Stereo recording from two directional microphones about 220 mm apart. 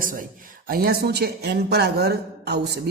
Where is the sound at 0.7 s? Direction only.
45° right (ahead or behind).